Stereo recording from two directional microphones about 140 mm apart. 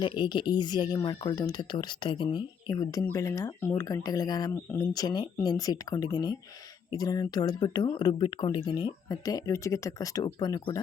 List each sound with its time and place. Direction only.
0.0 s speech: 35° left (ahead or behind)